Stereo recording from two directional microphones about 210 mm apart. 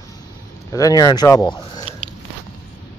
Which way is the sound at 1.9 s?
25° right (ahead or behind).